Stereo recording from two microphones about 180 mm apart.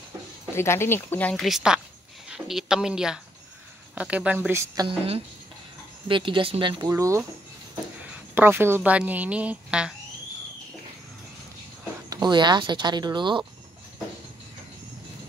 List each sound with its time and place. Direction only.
0.6 s speech: 15° left (ahead or behind); by 4.8 s 15° right (ahead or behind)
4.8 s a woman's voice: 35° right (ahead or behind)
6.9 s a woman's voice: 15° right (ahead or behind)
12.1 s speech: 25° right (ahead or behind)